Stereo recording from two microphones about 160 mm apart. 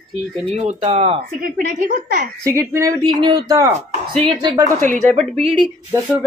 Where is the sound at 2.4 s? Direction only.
20° right (ahead or behind).